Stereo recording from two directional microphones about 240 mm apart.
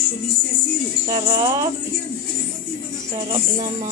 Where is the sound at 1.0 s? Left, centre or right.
Centre.